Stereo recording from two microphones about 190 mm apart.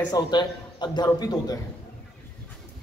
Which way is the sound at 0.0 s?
20° left (ahead or behind).